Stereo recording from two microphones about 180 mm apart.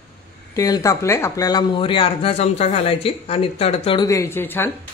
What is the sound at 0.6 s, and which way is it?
Speech, 20° left (ahead or behind).